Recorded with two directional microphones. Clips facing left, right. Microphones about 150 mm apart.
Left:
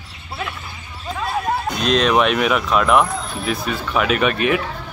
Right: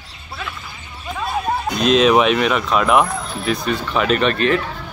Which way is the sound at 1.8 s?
Centre (ahead or behind).